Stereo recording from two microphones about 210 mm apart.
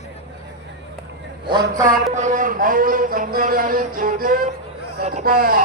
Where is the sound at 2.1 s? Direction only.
35° right (ahead or behind).